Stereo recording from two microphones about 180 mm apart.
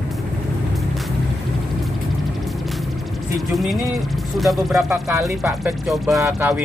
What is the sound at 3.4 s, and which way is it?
Speech, centre (ahead or behind).